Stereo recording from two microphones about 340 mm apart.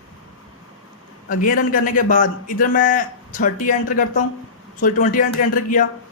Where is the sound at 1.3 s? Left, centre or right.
Left.